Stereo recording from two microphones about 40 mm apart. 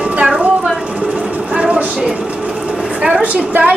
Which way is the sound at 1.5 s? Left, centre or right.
Right.